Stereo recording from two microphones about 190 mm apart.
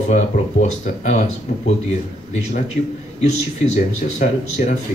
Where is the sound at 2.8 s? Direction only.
45° left (ahead or behind).